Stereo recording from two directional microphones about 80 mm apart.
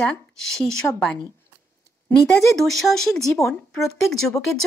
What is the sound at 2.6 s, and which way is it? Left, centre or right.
Speech, centre.